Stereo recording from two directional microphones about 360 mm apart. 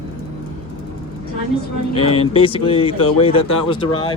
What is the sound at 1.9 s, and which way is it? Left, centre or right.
Speech, centre.